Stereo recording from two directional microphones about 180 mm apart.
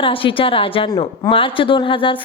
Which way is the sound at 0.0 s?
30° left (ahead or behind).